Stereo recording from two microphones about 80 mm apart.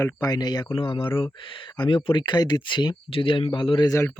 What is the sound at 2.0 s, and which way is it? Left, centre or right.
Speech, left.